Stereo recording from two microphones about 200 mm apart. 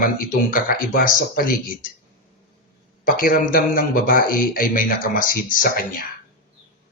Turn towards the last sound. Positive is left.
turn(degrees=45)  # may be behind; listen again after turning